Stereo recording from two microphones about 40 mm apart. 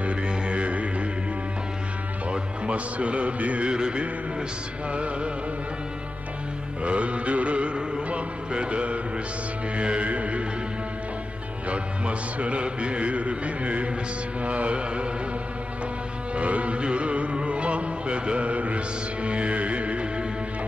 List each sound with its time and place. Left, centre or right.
0.0 s music: right
2.3 s speech: right
3.6 s music: right
6.8 s music: right
11.7 s music: right
16.3 s music: right